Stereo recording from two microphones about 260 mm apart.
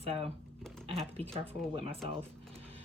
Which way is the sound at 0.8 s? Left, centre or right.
Right.